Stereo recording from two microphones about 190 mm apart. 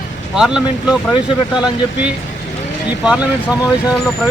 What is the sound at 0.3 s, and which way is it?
Speech, 5° right (ahead or behind).